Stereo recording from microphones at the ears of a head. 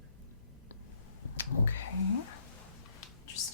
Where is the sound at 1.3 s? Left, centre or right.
Left.